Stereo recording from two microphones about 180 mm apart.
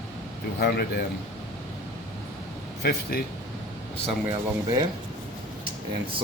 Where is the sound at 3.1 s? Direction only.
55° left (ahead or behind).